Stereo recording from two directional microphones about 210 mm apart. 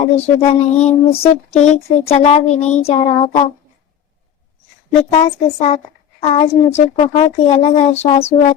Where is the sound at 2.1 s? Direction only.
30° left (ahead or behind).